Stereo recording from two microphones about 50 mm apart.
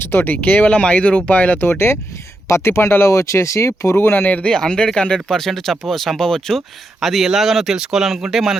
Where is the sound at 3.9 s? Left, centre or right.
Left.